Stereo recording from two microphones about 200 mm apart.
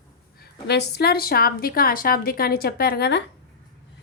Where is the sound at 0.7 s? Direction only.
55° left (ahead or behind).